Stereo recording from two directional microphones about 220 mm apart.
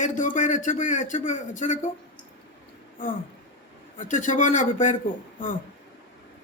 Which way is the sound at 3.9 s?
35° left (ahead or behind).